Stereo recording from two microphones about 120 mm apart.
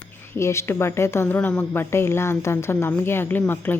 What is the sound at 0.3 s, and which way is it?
Speech, 20° left (ahead or behind).